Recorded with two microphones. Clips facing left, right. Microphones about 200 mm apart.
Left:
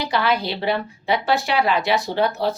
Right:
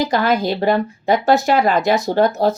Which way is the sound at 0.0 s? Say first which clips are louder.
Right 5 dB; 45° right (ahead or behind).